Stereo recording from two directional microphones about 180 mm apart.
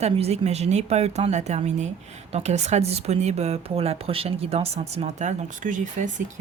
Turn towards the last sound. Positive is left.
turn(degrees=-45)  # may be behind; listen again after turning